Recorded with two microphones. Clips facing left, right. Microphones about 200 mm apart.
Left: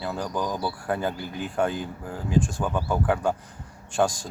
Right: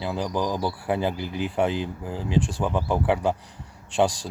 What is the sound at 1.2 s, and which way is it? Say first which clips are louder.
Speech: right 4 dB; 90° right.